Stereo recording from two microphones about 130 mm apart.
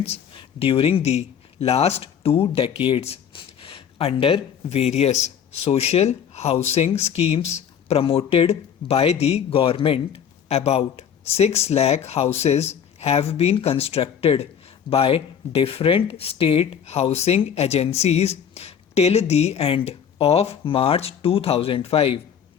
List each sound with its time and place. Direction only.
0.0 s speech: 50° left (ahead or behind)